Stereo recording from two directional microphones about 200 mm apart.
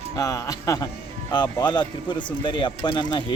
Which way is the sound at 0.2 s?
15° left (ahead or behind).